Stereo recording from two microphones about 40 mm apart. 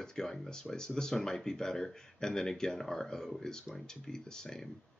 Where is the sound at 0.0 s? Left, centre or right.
Centre.